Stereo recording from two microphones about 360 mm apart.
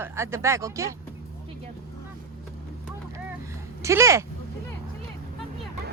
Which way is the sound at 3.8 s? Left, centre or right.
Centre.